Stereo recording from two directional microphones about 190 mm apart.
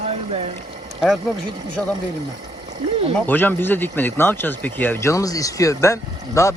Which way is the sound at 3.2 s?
10° left (ahead or behind).